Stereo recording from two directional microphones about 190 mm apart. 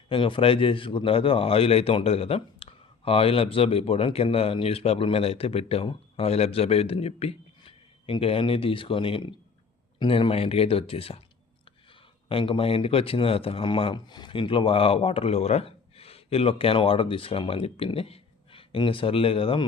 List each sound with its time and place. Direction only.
0.1 s a man's voice: 25° left (ahead or behind)
12.3 s a man's voice: 30° left (ahead or behind)